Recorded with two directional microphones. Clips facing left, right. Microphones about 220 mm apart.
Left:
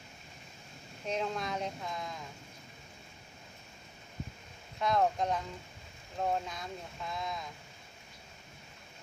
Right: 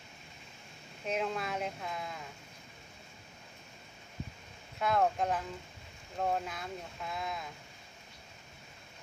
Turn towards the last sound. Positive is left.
turn(degrees=-5)  # may be behind; listen again after turning